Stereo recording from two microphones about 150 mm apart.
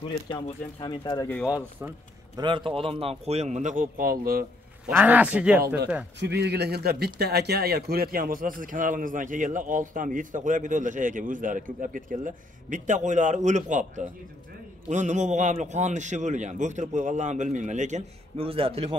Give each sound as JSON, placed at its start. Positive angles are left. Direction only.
{"t": 0.3, "sound": "speech", "side_deg": 30}
{"t": 2.3, "sound": "a man's voice", "side_deg": -35}
{"t": 4.8, "sound": "a man's voice", "side_deg": -10}
{"t": 6.4, "sound": "a man's voice", "side_deg": -90}
{"t": 18.4, "sound": "a man's voice", "side_deg": -40}